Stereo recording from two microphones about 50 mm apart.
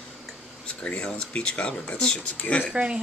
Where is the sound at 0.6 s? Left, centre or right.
Left.